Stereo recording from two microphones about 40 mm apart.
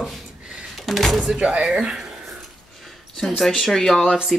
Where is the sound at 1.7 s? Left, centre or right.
Right.